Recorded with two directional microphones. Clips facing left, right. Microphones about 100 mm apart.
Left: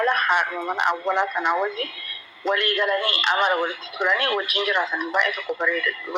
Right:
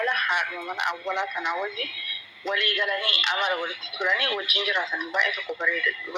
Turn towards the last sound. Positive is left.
turn(degrees=50)  # may be behind; listen again after turning